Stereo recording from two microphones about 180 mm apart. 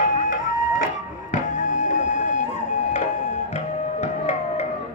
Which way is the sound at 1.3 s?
40° left (ahead or behind).